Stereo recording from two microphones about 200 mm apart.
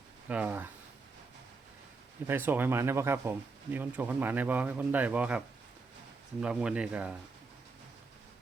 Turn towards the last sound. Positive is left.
turn(degrees=-5)  # may be behind; listen again after turning